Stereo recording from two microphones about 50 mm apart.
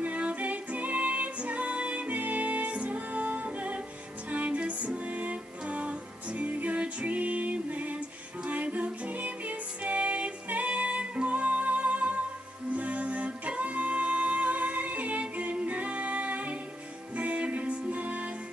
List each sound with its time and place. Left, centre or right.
0.0 s music: right